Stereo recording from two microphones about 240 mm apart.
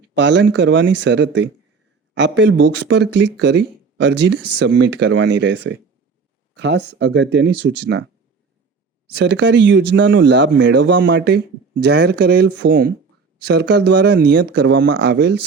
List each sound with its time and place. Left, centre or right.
0.0 s speech: right
9.1 s speech: right